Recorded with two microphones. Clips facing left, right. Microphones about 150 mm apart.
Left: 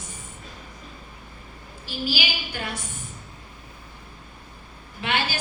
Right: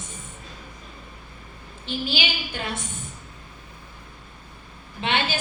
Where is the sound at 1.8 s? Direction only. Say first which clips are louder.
Right 1 dB; 25° right (ahead or behind).